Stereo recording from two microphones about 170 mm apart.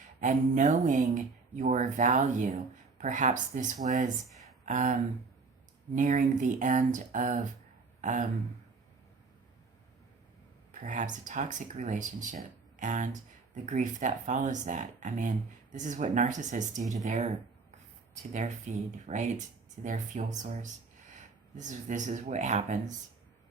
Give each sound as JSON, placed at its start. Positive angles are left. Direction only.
{"t": 0.2, "sound": "speech", "side_deg": -45}
{"t": 6.0, "sound": "speech", "side_deg": -45}
{"t": 10.7, "sound": "speech", "side_deg": -45}